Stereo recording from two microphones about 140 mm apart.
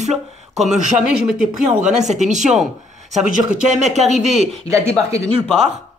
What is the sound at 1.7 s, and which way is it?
Speech, 55° right (ahead or behind).